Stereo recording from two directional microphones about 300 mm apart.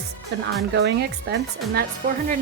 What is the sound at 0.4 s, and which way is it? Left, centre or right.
Speech, right.